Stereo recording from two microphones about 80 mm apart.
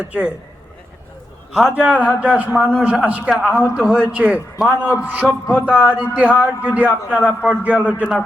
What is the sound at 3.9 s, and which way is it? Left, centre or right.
A man's voice, centre.